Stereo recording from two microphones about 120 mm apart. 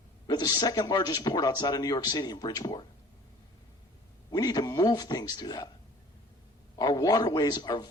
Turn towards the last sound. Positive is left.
turn(degrees=35)  # may be behind; listen again after turning